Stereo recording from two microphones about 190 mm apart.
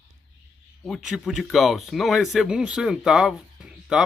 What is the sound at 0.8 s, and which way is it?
A man's voice, centre (ahead or behind).